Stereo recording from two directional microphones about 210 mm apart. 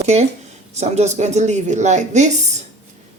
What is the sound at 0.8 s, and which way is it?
Speech, 30° right (ahead or behind).